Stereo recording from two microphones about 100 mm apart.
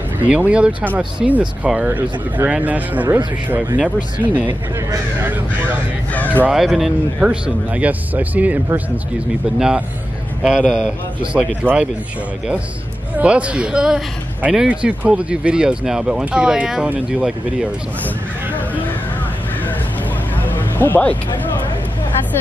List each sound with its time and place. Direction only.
0.2 s speech: 15° right (ahead or behind)
6.1 s a sound: 15° left (ahead or behind)
6.5 s speech: 5° right (ahead or behind)
9.6 s speech: 10° right (ahead or behind)
11.3 s speech: 10° right (ahead or behind)
13.2 s speech: 10° right (ahead or behind)
20.4 s music: 20° left (ahead or behind)